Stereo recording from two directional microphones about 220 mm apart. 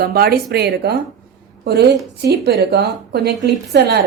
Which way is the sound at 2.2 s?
45° right (ahead or behind).